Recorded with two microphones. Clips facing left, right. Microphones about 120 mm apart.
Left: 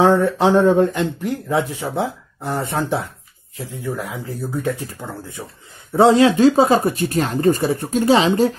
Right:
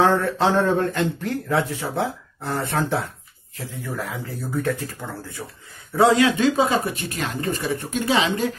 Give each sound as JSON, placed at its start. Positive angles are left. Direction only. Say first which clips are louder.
{"t": 0.0, "sound": "a man's voice", "louder": "left 4 dB", "side_deg": 15}